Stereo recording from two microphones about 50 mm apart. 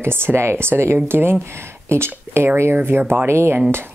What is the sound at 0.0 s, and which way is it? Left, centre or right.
Speech, right.